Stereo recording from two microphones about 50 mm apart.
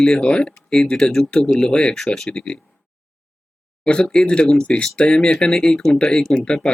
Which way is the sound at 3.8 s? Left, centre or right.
Centre.